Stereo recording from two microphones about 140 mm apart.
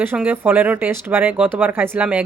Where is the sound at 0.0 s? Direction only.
15° right (ahead or behind).